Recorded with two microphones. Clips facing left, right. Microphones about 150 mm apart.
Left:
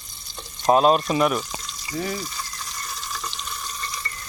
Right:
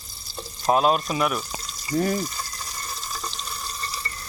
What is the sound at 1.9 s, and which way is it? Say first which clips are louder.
Speech: right 5 dB; 40° right (ahead or behind).